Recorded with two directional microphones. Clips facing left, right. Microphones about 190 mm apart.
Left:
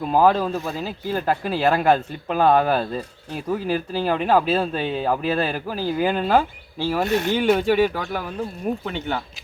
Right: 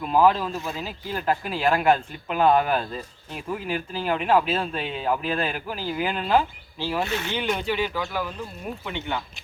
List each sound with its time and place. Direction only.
0.0 s speech: 40° left (ahead or behind)
8.9 s speech: 35° left (ahead or behind)